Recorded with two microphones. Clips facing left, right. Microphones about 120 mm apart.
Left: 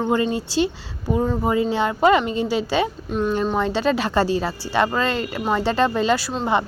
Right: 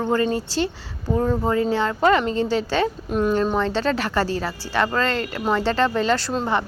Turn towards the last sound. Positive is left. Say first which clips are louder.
# left 1 dB
turn(degrees=10)  # may be behind; listen again after turning